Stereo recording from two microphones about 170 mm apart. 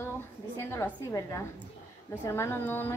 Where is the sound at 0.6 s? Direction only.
15° left (ahead or behind).